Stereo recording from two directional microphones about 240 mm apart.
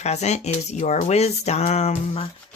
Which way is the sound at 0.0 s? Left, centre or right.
Left.